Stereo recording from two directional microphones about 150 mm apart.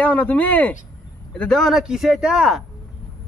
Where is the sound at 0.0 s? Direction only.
10° left (ahead or behind).